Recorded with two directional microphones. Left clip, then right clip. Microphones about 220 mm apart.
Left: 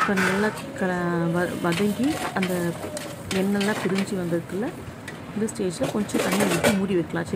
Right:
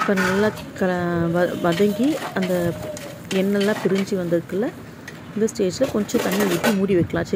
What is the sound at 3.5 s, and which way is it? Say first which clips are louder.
Speech: right 4 dB; 20° right (ahead or behind).